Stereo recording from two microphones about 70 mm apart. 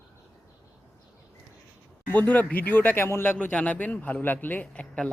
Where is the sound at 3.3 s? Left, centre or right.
Left.